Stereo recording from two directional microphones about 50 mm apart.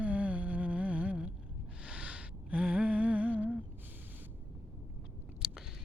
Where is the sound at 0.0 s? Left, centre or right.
Right.